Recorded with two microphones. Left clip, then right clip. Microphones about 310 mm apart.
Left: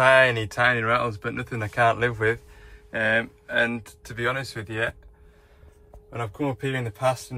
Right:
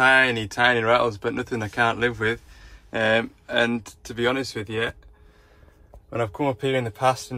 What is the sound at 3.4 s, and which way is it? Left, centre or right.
Speech, centre.